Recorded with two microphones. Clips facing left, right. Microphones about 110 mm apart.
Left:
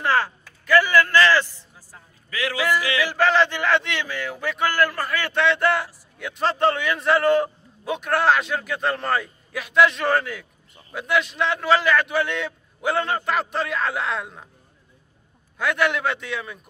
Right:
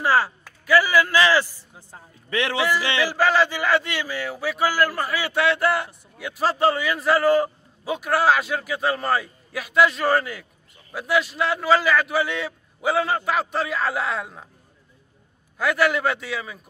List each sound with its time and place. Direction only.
0.0 s speech: 5° right (ahead or behind)
1.8 s a sound: 25° right (ahead or behind)
3.1 s a man's voice: 5° right (ahead or behind)
15.5 s a man's voice: centre (ahead or behind)